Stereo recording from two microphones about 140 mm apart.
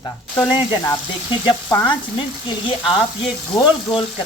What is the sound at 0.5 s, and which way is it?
Speech, 25° left (ahead or behind).